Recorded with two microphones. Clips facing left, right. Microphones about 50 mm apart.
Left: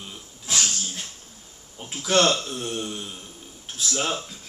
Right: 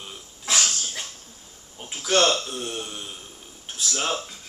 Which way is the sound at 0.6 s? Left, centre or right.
Right.